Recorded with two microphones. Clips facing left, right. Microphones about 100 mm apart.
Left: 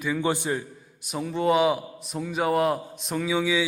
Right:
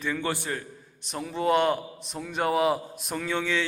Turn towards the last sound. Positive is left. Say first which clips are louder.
# left 4 dB
turn(degrees=5)  # may be behind; listen again after turning